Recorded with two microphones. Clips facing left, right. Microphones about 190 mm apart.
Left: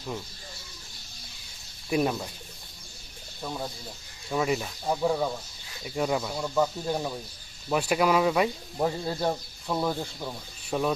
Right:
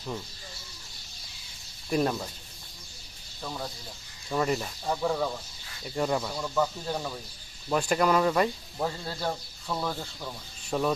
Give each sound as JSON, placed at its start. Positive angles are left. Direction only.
{"t": 1.9, "sound": "speech", "side_deg": 5}
{"t": 3.4, "sound": "speech", "side_deg": 10}
{"t": 8.8, "sound": "speech", "side_deg": 20}